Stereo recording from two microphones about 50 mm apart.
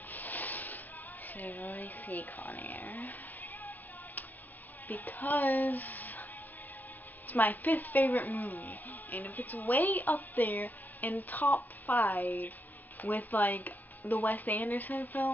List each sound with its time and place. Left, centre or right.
0.1 s a sound: left
4.8 s speech: left
7.2 s a woman's voice: left